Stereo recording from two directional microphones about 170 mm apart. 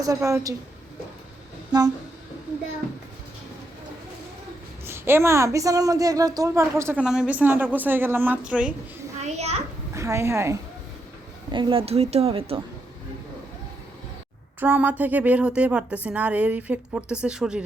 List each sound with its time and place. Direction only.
0.0 s a woman's voice: 20° right (ahead or behind)
4.9 s a woman's voice: 15° right (ahead or behind)
7.0 s a woman's voice: 5° right (ahead or behind)
9.2 s a woman's voice: 40° right (ahead or behind)
9.9 s a woman's voice: 15° right (ahead or behind)
11.5 s a woman's voice: 30° right (ahead or behind)
14.6 s a woman's voice: 10° right (ahead or behind)